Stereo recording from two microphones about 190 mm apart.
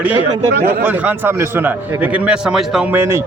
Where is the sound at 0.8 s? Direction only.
10° right (ahead or behind).